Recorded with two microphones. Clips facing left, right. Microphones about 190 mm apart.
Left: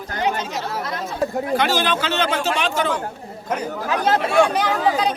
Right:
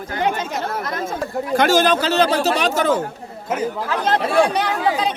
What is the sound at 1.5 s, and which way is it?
Speech, 45° right (ahead or behind).